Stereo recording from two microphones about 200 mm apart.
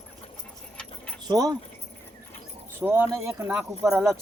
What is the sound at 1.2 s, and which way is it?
Speech, 20° right (ahead or behind).